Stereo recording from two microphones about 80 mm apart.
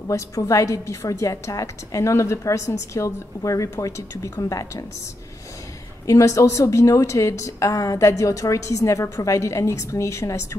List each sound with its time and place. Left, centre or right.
0.1 s a woman's voice: left
6.0 s a woman's voice: left